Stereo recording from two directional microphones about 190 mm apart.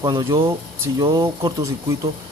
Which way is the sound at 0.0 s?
20° right (ahead or behind).